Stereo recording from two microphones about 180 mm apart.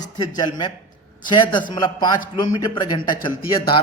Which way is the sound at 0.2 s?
25° left (ahead or behind).